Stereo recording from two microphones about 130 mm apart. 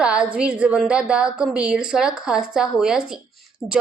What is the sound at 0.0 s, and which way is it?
A woman's voice, 5° right (ahead or behind).